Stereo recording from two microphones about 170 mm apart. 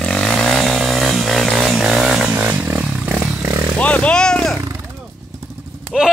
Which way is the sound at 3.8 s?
10° left (ahead or behind).